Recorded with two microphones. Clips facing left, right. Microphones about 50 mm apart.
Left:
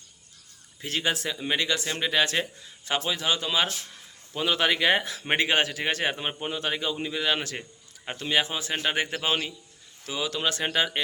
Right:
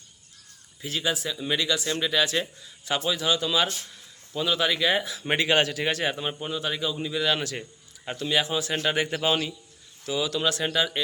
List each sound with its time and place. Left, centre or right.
0.8 s speech: left
1.4 s a man's voice: left
4.4 s speech: left
5.2 s a man's voice: left
7.1 s a man's voice: left
8.7 s a man's voice: centre